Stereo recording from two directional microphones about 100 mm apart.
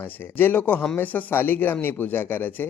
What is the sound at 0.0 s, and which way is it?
Speech, 20° left (ahead or behind).